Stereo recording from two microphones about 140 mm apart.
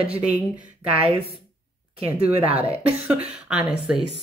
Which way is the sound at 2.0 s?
10° right (ahead or behind).